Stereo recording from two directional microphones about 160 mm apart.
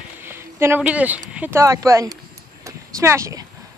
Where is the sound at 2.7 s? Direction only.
20° right (ahead or behind).